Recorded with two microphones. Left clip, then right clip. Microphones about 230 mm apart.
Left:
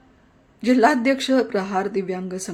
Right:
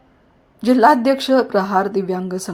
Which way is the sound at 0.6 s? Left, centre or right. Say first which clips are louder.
Right 5 dB; centre.